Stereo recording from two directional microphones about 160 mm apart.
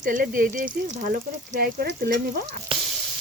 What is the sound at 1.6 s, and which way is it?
Stir, 70° right (ahead or behind).